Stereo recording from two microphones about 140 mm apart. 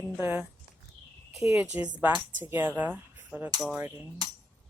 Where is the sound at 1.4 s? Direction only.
20° right (ahead or behind).